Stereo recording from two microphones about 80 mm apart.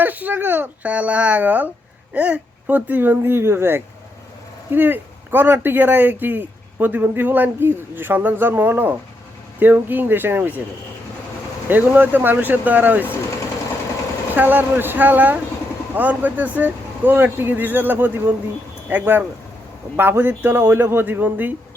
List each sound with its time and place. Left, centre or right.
0.0 s speech: right
11.7 s speech: right
14.3 s speech: right